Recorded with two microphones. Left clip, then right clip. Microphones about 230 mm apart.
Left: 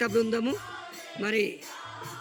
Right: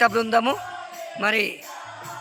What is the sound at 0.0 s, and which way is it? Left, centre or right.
A man's voice, centre.